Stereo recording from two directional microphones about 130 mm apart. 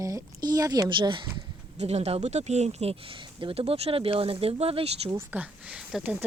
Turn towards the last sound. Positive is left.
turn(degrees=-5)  # may be behind; listen again after turning